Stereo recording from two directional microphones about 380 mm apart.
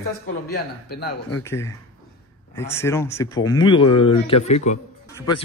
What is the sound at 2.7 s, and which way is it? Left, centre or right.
Speech, centre.